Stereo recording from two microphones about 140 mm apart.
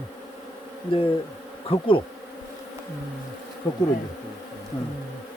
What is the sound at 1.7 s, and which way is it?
Speech, 40° left (ahead or behind).